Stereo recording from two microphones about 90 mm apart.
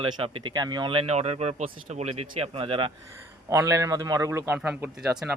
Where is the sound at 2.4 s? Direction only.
90° right.